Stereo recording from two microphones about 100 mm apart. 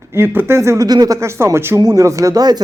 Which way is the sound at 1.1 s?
30° right (ahead or behind).